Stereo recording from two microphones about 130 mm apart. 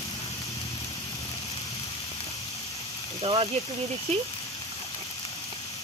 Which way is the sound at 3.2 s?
50° right (ahead or behind).